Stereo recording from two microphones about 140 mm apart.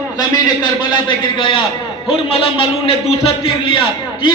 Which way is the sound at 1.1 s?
35° left (ahead or behind).